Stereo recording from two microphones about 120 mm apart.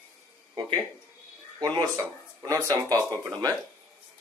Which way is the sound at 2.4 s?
30° right (ahead or behind).